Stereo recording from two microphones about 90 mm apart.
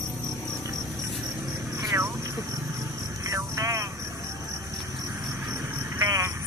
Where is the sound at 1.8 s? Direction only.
35° right (ahead or behind).